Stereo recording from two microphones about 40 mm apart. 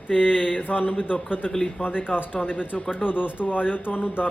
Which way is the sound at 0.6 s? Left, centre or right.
Left.